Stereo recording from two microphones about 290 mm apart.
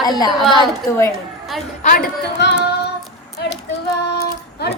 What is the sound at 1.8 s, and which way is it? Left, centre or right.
Speech, left.